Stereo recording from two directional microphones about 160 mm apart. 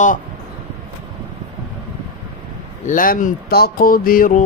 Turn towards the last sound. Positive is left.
turn(degrees=60)  # may be behind; listen again after turning